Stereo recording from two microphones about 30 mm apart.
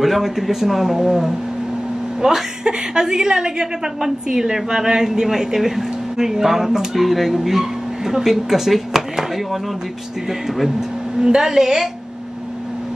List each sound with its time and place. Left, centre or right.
0.0 s a woman's voice: centre
11.1 s speech: centre